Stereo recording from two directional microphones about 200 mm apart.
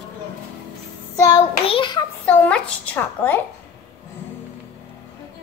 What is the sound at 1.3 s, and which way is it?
Child singing, 25° left (ahead or behind).